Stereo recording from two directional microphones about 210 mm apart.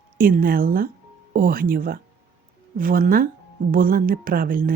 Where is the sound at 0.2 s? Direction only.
40° right (ahead or behind).